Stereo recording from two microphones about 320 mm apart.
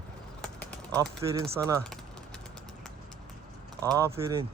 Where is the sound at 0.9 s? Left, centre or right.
Centre.